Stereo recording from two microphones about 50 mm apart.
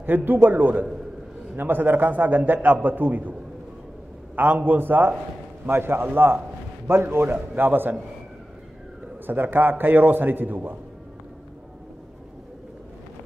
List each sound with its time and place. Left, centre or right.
0.0 s a man's voice: right
4.4 s a man's voice: right
7.2 s a man's voice: right
9.2 s a man's voice: right